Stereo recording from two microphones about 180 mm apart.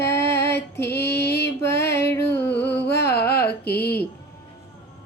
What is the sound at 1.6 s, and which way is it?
Music, 15° left (ahead or behind).